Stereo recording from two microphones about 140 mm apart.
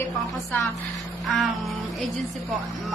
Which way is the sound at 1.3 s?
Centre (ahead or behind).